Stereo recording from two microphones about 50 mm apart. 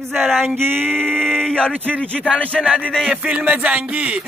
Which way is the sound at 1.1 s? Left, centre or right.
Centre.